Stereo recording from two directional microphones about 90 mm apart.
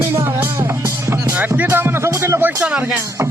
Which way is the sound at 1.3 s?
20° right (ahead or behind).